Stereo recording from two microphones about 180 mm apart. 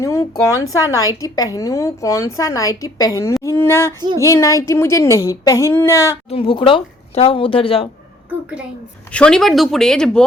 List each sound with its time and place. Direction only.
0.0 s a woman's voice: 20° left (ahead or behind)
6.2 s speech: 30° left (ahead or behind)
9.1 s speech: 5° left (ahead or behind)